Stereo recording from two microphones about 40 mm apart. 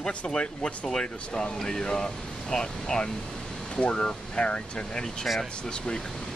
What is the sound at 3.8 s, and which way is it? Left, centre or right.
Speech, left.